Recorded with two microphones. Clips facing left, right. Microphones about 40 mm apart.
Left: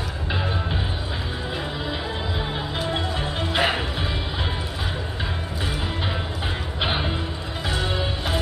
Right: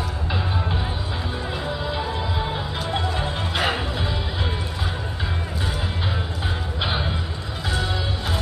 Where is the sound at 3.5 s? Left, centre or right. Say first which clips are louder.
Left 2 dB; centre.